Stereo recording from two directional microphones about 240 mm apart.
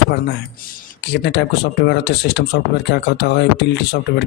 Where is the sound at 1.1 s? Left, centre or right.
Left.